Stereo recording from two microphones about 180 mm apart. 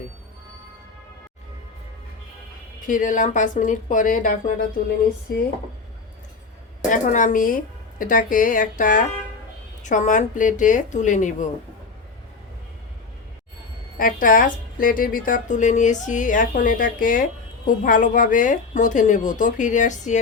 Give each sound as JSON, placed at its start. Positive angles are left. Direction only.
{"t": 2.8, "sound": "a woman's voice", "side_deg": 45}
{"t": 5.3, "sound": "speech", "side_deg": 60}
{"t": 6.9, "sound": "a woman's voice", "side_deg": 45}
{"t": 14.0, "sound": "a woman's voice", "side_deg": 50}